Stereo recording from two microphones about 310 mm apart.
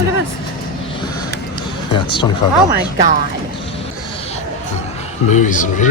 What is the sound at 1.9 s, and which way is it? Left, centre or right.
Speech, centre.